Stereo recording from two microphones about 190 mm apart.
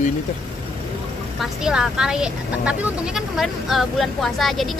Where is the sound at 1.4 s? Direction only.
5° right (ahead or behind).